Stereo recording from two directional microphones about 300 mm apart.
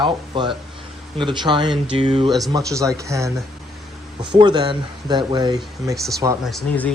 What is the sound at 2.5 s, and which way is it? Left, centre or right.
Speech, centre.